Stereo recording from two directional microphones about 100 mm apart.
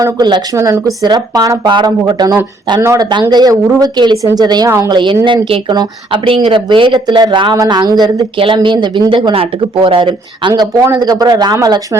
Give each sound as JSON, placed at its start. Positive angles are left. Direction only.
{"t": 0.0, "sound": "speech", "side_deg": -45}
{"t": 0.5, "sound": "speech", "side_deg": -30}
{"t": 1.0, "sound": "speech", "side_deg": -45}
{"t": 8.4, "sound": "speech", "side_deg": -60}
{"t": 10.5, "sound": "speech", "side_deg": -40}